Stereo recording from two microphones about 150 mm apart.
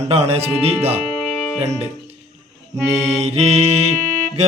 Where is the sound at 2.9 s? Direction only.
45° right (ahead or behind).